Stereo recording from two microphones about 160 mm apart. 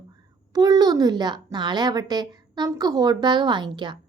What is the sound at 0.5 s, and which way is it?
Speech, 25° right (ahead or behind).